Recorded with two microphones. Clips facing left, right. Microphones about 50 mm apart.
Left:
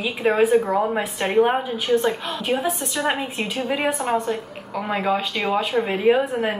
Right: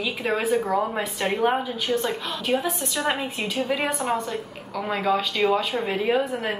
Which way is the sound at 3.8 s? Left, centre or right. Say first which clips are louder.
Left 3 dB; centre.